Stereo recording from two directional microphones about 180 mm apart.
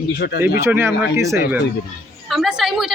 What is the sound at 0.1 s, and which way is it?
Speech, 60° left (ahead or behind).